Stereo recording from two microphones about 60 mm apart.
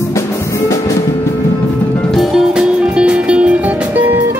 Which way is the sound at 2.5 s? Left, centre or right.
Centre.